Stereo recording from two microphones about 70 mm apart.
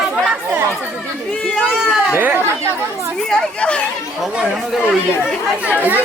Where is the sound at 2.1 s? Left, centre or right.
Right.